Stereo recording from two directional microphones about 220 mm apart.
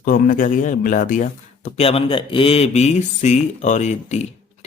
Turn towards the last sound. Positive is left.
turn(degrees=30)  # may be behind; listen again after turning